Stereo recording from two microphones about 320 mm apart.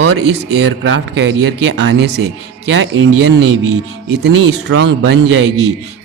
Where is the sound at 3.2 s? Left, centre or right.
Right.